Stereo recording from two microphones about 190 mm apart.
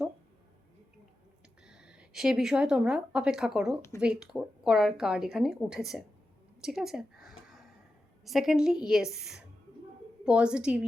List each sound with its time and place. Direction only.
1.6 s a woman's voice: 5° right (ahead or behind)
3.8 s speech: 15° left (ahead or behind)
4.0 s a woman's voice: 5° right (ahead or behind)
6.6 s a sound: centre (ahead or behind)
8.2 s a woman's voice: centre (ahead or behind)